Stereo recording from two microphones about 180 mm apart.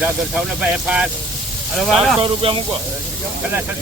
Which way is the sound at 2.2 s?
30° right (ahead or behind).